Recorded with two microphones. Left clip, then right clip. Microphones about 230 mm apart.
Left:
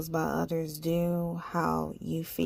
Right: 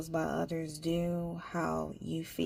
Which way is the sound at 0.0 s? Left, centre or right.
Left.